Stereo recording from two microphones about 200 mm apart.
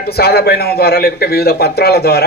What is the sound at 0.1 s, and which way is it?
A man's voice, 50° left (ahead or behind).